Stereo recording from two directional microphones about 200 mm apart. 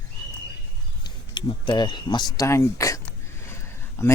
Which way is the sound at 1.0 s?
20° left (ahead or behind).